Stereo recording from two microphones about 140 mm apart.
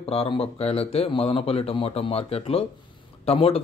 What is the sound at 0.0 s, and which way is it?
Speech, 45° left (ahead or behind).